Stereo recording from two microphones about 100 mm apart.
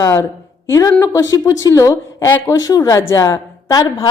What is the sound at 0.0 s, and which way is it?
A woman's voice, 25° left (ahead or behind).